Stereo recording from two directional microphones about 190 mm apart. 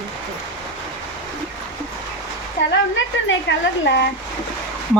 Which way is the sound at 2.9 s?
75° left (ahead or behind).